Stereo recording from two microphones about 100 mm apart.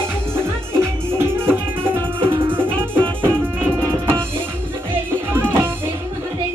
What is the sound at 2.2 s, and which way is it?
Music, 60° right (ahead or behind).